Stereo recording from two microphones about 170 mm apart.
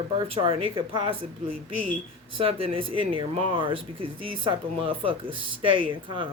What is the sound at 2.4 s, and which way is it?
Speech, 30° right (ahead or behind).